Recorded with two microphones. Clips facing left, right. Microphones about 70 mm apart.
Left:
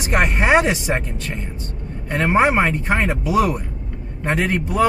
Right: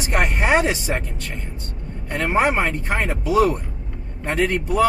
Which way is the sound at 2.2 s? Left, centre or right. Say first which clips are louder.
Left 3 dB; centre.